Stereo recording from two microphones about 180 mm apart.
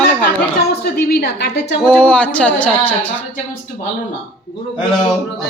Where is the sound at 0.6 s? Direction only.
60° left (ahead or behind).